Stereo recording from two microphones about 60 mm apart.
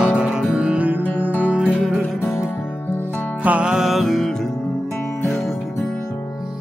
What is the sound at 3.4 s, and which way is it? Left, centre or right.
Music, right.